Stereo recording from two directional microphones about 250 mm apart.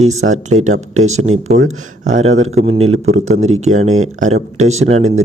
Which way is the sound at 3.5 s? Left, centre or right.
Right.